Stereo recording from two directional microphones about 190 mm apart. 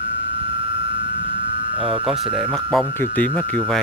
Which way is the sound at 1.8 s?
5° right (ahead or behind).